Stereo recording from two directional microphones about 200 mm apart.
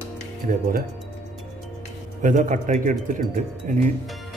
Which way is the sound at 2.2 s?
40° right (ahead or behind).